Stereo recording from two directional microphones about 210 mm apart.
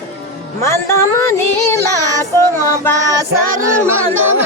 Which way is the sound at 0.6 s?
15° left (ahead or behind).